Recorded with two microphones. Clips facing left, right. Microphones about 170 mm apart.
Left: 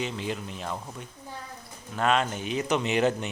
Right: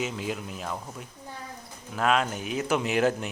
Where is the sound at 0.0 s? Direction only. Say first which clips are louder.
Even; 5° right (ahead or behind).